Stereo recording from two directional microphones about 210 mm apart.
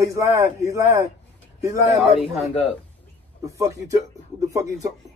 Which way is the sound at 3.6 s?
15° right (ahead or behind).